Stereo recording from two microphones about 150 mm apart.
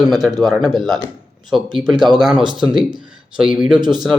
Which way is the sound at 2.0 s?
5° right (ahead or behind).